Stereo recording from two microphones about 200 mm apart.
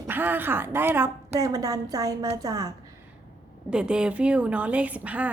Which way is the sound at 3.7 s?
5° right (ahead or behind).